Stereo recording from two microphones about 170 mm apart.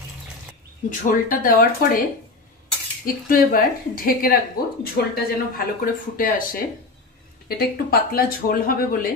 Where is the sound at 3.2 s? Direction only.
55° left (ahead or behind).